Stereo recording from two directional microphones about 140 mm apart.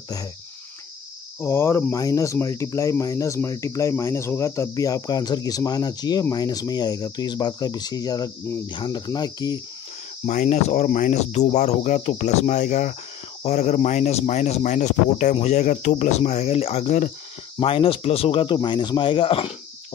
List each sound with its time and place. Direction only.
1.4 s speech: 15° left (ahead or behind)
10.2 s speech: 60° left (ahead or behind)
13.4 s speech: 50° left (ahead or behind)
17.6 s speech: 40° left (ahead or behind)